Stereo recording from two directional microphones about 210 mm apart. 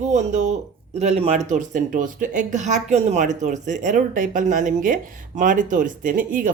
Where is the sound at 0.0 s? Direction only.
35° right (ahead or behind).